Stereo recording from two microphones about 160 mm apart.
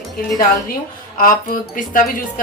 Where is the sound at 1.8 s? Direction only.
60° left (ahead or behind).